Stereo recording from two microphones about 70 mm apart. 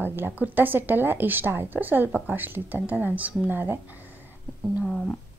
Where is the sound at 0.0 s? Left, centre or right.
Right.